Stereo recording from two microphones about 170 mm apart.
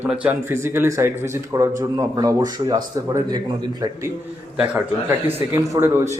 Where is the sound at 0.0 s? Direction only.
10° right (ahead or behind); by 4.1 s 25° right (ahead or behind).